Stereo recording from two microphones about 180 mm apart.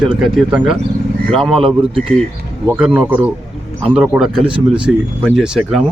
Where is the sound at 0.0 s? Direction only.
Centre (ahead or behind).